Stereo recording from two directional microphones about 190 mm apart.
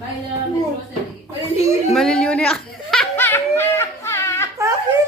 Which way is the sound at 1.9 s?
5° left (ahead or behind).